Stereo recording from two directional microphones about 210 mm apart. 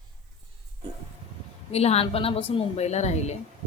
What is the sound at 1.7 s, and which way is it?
A woman's voice, 30° left (ahead or behind).